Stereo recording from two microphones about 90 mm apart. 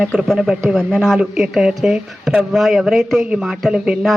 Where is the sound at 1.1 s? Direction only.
5° right (ahead or behind).